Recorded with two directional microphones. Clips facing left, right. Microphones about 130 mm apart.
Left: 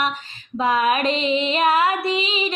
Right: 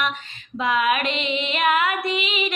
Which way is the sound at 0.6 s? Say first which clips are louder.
Left 2 dB; 35° left (ahead or behind).